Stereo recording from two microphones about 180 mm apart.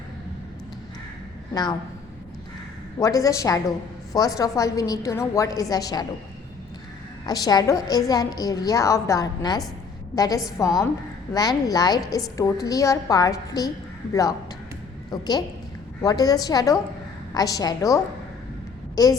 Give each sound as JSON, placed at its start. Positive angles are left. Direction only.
{"t": 3.0, "sound": "a woman's voice", "side_deg": 20}
{"t": 7.3, "sound": "a woman's voice", "side_deg": 20}